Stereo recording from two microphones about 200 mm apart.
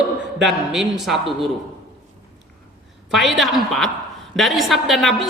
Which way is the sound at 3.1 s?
Centre (ahead or behind).